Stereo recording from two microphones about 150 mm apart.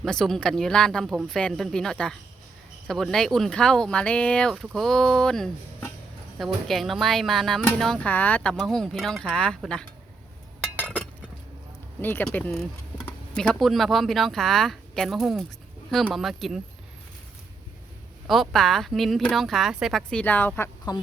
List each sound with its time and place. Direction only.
0.0 s speech: 5° left (ahead or behind)
10.8 s chink: 10° left (ahead or behind)
11.9 s speech: 15° left (ahead or behind)
18.3 s speech: centre (ahead or behind)
20.9 s speech: 30° left (ahead or behind)